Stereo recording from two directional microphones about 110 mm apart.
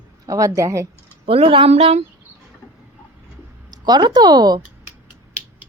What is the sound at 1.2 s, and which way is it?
Speech, 60° right (ahead or behind).